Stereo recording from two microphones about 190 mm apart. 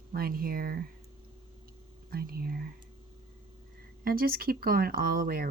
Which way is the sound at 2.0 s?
50° right (ahead or behind).